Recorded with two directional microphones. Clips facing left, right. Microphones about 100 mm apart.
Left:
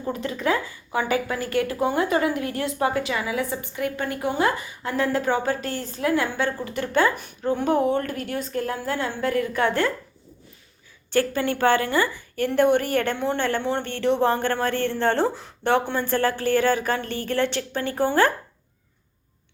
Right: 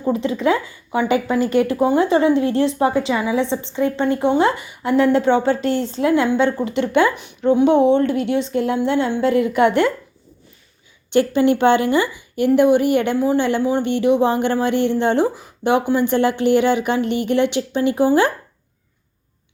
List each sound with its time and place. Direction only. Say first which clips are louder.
0.0 s speech: right 7 dB; 25° right (ahead or behind)
11.1 s speech: right 7 dB; 20° right (ahead or behind)